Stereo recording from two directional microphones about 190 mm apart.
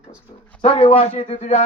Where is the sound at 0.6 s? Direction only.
30° left (ahead or behind).